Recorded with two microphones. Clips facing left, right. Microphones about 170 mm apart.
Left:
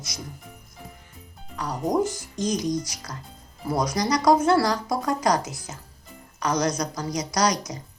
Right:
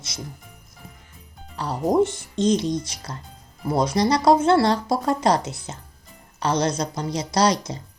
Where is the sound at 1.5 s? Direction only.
30° right (ahead or behind).